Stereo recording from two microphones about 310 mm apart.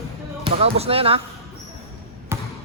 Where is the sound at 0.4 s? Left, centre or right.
Centre.